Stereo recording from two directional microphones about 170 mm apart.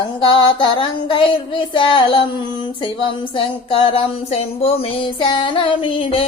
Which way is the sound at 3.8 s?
35° left (ahead or behind).